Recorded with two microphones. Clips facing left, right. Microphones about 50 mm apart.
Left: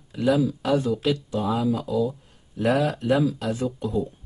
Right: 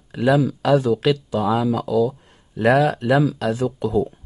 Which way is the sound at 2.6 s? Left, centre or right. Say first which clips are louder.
Right 6 dB; right.